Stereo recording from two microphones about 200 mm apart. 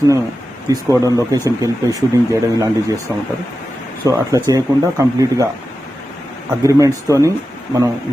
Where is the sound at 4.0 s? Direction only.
15° right (ahead or behind).